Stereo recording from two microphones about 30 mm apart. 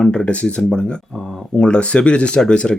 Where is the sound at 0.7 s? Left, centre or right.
Left.